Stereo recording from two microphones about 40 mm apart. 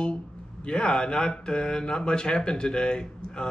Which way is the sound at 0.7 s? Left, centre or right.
Left.